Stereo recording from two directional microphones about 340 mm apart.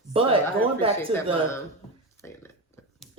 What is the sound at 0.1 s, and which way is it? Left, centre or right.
Speech, centre.